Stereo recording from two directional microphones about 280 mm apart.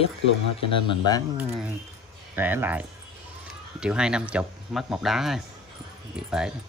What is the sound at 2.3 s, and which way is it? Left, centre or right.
Speech, centre.